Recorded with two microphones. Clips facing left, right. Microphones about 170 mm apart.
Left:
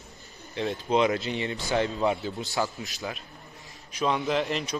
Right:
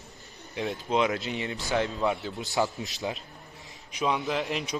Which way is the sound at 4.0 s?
Centre (ahead or behind).